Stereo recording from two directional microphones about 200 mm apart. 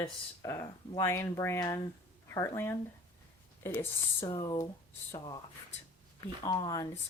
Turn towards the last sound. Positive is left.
turn(degrees=20)  # may be behind; listen again after turning